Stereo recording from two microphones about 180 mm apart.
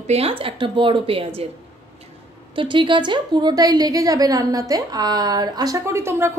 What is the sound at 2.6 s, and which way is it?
A woman's voice, 25° right (ahead or behind).